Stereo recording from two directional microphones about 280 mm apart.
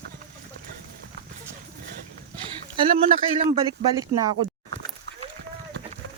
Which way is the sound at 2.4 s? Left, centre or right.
Centre.